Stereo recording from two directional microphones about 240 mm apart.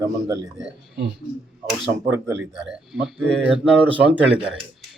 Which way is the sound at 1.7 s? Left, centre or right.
Centre.